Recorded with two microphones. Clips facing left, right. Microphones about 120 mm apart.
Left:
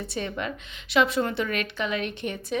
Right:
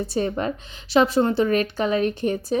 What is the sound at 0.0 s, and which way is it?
A woman's voice, 40° right (ahead or behind).